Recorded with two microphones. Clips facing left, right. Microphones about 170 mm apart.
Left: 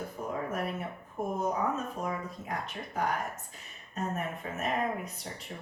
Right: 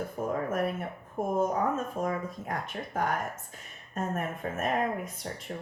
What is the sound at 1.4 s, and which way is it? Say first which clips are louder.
Speech: right 4 dB; 50° right (ahead or behind).